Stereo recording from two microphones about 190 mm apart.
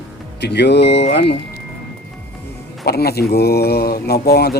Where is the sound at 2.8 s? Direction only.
55° left (ahead or behind).